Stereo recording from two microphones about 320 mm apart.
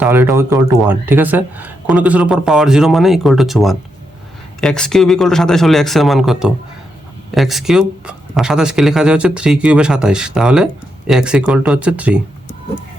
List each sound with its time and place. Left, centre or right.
0.0 s speech: centre